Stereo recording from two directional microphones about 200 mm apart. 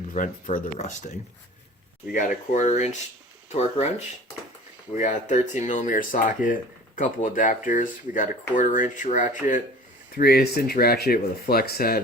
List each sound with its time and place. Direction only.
0.1 s speech: 40° left (ahead or behind)
2.5 s speech: 35° left (ahead or behind)
4.9 s speech: 35° left (ahead or behind)
10.2 s speech: 50° left (ahead or behind)